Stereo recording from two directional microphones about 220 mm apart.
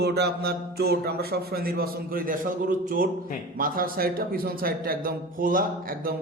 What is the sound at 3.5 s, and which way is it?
A man's voice, 40° right (ahead or behind).